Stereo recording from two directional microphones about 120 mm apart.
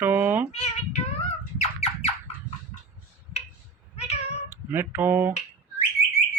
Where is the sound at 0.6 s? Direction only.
70° left (ahead or behind).